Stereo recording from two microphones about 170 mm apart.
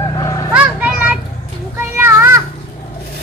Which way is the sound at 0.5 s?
5° right (ahead or behind).